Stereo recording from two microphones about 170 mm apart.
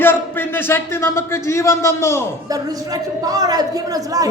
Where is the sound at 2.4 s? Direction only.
20° right (ahead or behind).